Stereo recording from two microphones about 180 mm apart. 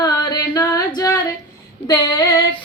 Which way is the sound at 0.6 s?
15° left (ahead or behind).